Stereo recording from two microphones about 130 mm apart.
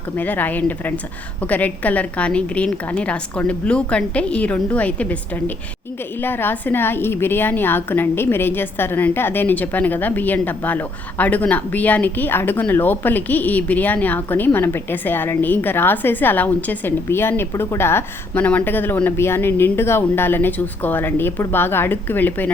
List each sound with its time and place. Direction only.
0.2 s a woman's voice: 15° left (ahead or behind)
6.2 s a woman's voice: 15° left (ahead or behind)